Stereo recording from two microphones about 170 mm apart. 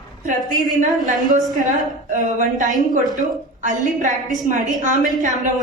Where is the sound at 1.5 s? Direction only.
50° right (ahead or behind).